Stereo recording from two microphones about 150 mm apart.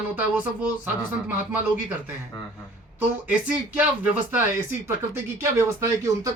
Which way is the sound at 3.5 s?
10° right (ahead or behind).